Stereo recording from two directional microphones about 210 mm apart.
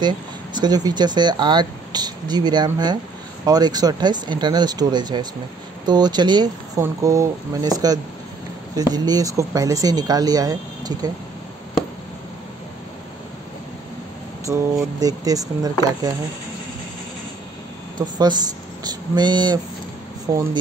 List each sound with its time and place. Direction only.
0.6 s speech: 20° right (ahead or behind)
15.0 s speech: 15° right (ahead or behind)
18.1 s speech: 20° right (ahead or behind)